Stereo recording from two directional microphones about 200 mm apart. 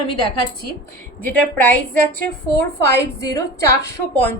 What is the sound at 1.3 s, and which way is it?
Speech, 10° left (ahead or behind).